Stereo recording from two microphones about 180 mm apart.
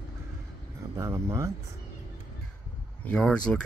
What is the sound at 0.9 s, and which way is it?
Speech, 15° right (ahead or behind).